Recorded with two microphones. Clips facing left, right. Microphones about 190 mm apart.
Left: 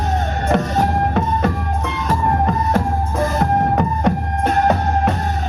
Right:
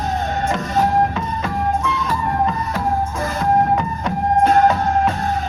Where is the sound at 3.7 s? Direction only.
65° left (ahead or behind).